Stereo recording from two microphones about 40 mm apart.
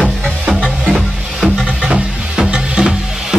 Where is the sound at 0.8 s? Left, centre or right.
Centre.